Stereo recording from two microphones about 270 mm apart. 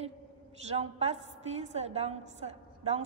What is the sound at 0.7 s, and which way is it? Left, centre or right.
A woman's voice, right.